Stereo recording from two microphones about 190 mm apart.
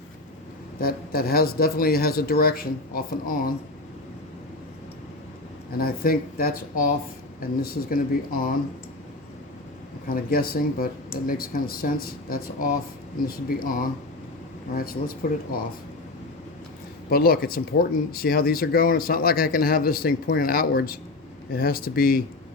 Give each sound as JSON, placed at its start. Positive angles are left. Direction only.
{"t": 0.8, "sound": "speech", "side_deg": 50}
{"t": 5.7, "sound": "speech", "side_deg": 50}
{"t": 10.1, "sound": "speech", "side_deg": 50}
{"t": 17.1, "sound": "speech", "side_deg": 55}